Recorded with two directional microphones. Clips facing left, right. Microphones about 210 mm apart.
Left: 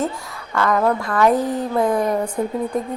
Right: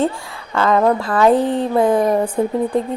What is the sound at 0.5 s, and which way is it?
Speech, 20° right (ahead or behind).